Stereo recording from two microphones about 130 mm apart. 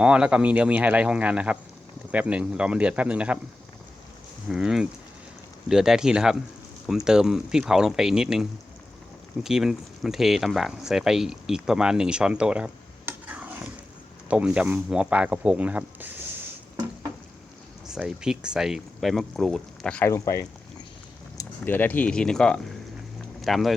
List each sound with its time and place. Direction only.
0.0 s speech: 10° right (ahead or behind)
4.4 s speech: 5° right (ahead or behind)
17.8 s speech: 5° right (ahead or behind)
20.1 s speech: 20° left (ahead or behind)
21.6 s speech: 15° left (ahead or behind)